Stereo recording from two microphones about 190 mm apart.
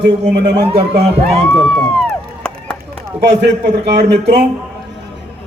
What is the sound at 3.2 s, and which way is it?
Speech, 65° right (ahead or behind).